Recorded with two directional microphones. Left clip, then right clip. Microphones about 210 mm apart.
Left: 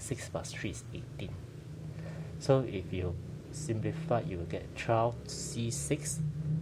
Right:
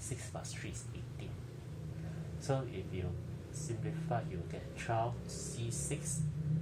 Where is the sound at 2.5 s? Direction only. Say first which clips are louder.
Left 9 dB; 50° left (ahead or behind).